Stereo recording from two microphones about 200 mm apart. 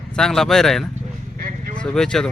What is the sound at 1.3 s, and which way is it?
Vehicle, 45° right (ahead or behind).